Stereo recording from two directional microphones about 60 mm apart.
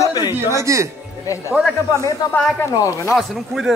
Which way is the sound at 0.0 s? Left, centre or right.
Left.